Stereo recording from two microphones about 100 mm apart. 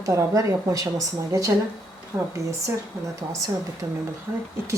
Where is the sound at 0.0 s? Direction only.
30° right (ahead or behind).